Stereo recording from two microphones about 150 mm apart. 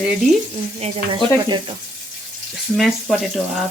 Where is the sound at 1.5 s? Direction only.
30° right (ahead or behind).